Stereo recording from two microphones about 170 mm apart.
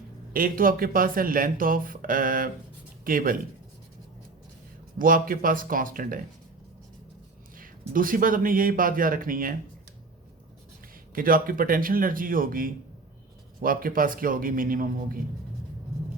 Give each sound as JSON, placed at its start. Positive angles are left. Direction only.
{"t": 0.3, "sound": "speech", "side_deg": -55}
{"t": 4.9, "sound": "speech", "side_deg": -55}
{"t": 7.5, "sound": "speech", "side_deg": -55}
{"t": 11.1, "sound": "speech", "side_deg": -55}